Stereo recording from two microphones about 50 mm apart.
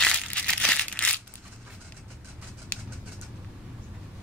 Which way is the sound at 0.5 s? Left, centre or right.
Centre.